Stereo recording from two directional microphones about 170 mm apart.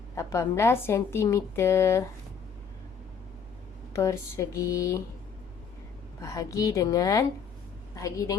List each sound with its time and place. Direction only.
0.2 s a woman's voice: 20° left (ahead or behind)
3.9 s speech: 20° left (ahead or behind)
6.2 s speech: 20° left (ahead or behind)